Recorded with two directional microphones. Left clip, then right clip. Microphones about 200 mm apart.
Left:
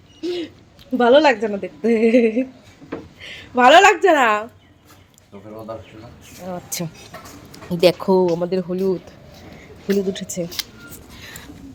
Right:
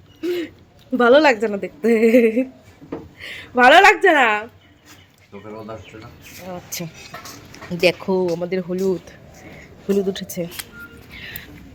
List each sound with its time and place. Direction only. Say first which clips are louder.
0.2 s owl: right 2 dB; 5° right (ahead or behind)
0.9 s a woman's voice: even; 5° right (ahead or behind)
6.5 s speech: left 2 dB; 25° left (ahead or behind)
8.6 s a woman's voice: even; centre (ahead or behind)
11.1 s music: right 4 dB; 15° left (ahead or behind)